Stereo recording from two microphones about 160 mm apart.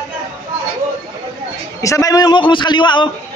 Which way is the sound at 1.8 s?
20° left (ahead or behind).